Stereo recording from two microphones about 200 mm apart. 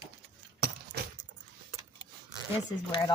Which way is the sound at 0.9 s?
55° right (ahead or behind).